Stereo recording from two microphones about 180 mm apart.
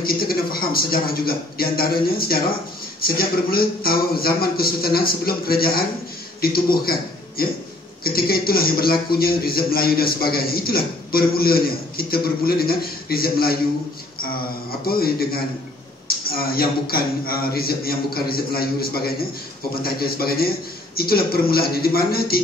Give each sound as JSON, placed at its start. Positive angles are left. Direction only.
{"t": 0.0, "sound": "a man's voice", "side_deg": 55}
{"t": 14.9, "sound": "a man's voice", "side_deg": 55}